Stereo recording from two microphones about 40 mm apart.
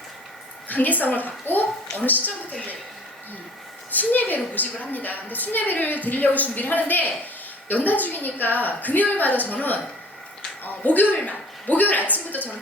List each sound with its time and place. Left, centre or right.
0.7 s a woman's voice: left
3.9 s a woman's voice: left
11.3 s a sound: left
12.3 s a woman's voice: left